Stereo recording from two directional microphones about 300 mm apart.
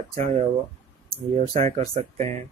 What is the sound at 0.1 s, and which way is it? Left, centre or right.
Speech, right.